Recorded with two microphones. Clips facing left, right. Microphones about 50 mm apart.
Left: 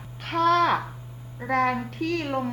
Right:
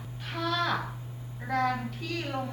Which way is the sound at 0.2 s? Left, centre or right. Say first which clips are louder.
Left 10 dB; left.